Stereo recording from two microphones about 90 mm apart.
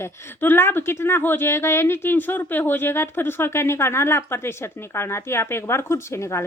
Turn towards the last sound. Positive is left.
turn(degrees=30)  # may be behind; listen again after turning